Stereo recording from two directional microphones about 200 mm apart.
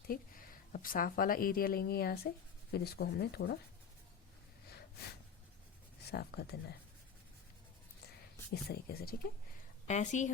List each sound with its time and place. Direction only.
0.1 s speech: 45° left (ahead or behind)
6.1 s speech: 55° left (ahead or behind)
8.6 s speech: 50° left (ahead or behind)
9.8 s a woman's voice: 35° left (ahead or behind)